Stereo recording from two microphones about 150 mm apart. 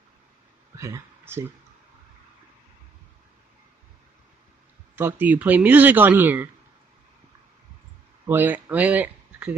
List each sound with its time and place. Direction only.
0.7 s speech: 20° right (ahead or behind)
4.9 s speech: 15° right (ahead or behind)
8.3 s speech: 10° right (ahead or behind)